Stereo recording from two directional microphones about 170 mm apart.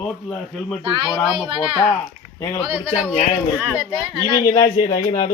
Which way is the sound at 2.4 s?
15° left (ahead or behind).